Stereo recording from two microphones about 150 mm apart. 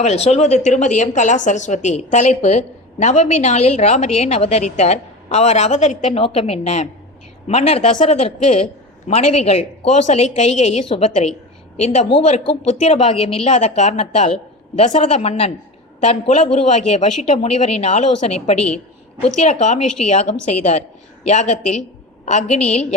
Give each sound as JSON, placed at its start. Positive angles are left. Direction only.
{"t": 0.0, "sound": "a woman's voice", "side_deg": 50}
{"t": 22.3, "sound": "a woman's voice", "side_deg": 50}